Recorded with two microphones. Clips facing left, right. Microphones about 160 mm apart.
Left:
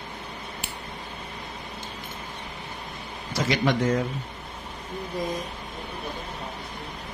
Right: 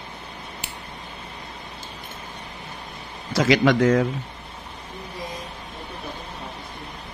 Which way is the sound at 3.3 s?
90° right.